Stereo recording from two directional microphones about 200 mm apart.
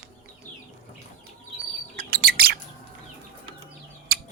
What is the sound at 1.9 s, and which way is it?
Bird, 45° right (ahead or behind).